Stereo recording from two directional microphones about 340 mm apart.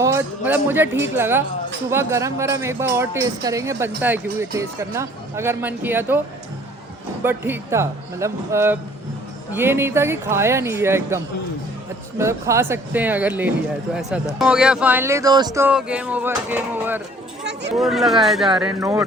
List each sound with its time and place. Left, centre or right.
0.0 s speech: centre
7.3 s a man's voice: centre
17.4 s speech: right
17.7 s a man's voice: centre